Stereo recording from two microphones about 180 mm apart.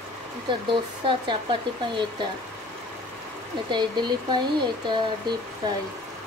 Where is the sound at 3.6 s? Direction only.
25° right (ahead or behind).